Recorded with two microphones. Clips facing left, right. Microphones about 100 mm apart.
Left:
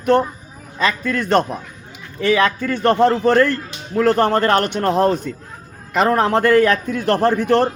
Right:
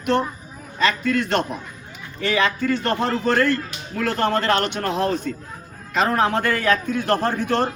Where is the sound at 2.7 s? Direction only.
55° left (ahead or behind).